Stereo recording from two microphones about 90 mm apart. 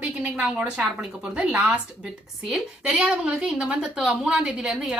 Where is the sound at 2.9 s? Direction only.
15° right (ahead or behind).